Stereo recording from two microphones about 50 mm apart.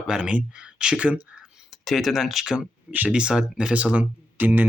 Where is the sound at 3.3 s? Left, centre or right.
Centre; by 4.7 s right.